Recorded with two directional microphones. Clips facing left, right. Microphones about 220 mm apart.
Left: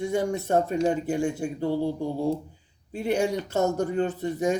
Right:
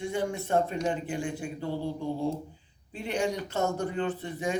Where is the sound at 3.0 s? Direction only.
40° left (ahead or behind).